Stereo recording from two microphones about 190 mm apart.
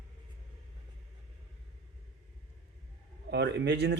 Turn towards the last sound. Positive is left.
turn(degrees=-60)  # may be behind; listen again after turning